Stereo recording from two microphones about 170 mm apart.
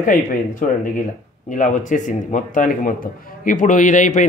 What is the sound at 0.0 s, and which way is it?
Speech, 50° left (ahead or behind).